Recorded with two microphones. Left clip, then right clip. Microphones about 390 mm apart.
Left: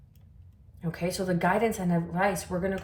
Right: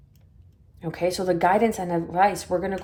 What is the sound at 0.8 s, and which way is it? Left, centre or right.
Speech, centre.